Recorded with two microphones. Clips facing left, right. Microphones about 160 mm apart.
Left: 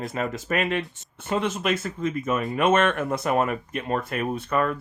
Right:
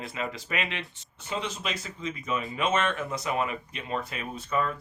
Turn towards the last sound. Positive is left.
turn(degrees=65)  # may be behind; listen again after turning